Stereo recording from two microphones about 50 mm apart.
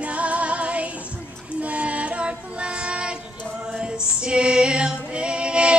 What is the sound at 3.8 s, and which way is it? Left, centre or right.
Female singing, centre.